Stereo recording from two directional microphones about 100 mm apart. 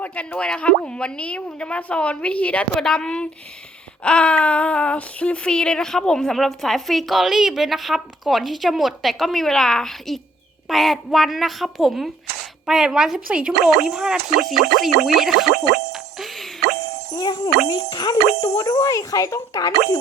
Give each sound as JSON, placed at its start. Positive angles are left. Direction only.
{"t": 0.0, "sound": "speech", "side_deg": 15}
{"t": 15.9, "sound": "music", "side_deg": 0}
{"t": 17.7, "sound": "speech", "side_deg": 45}